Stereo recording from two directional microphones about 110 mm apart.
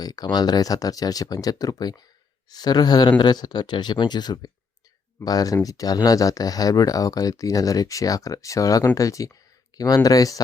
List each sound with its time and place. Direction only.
0.0 s speech: 35° left (ahead or behind)